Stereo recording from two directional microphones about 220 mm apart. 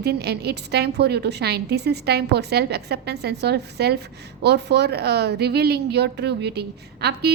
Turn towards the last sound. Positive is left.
turn(degrees=-50)  # may be behind; listen again after turning